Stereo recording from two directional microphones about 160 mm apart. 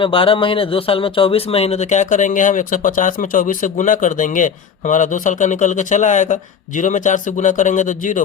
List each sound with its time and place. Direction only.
0.0 s a man's voice: 35° left (ahead or behind); by 8.2 s 55° left (ahead or behind)